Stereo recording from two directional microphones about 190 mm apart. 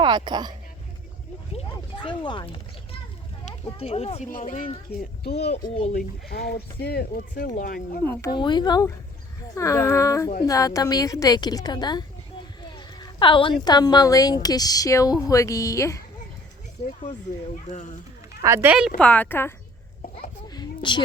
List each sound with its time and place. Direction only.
0.0 s speech: 25° right (ahead or behind)
1.5 s a sound: 25° left (ahead or behind)
3.4 s speech: 30° left (ahead or behind)
4.3 s speech: 45° left (ahead or behind)
5.6 s a woman's voice: 25° left (ahead or behind)
5.9 s speech: 50° left (ahead or behind)
8.0 s speech: 10° left (ahead or behind)
8.3 s a woman's voice: 25° left (ahead or behind)
12.6 s a sound: 20° left (ahead or behind)
13.7 s a woman's voice: 20° left (ahead or behind)
17.7 s speech: 40° left (ahead or behind)
18.4 s speech: 15° right (ahead or behind)
18.9 s speech: 10° left (ahead or behind)
20.5 s a sound: 25° left (ahead or behind)